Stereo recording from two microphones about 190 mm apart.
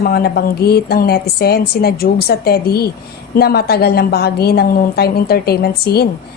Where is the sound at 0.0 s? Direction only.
55° left (ahead or behind).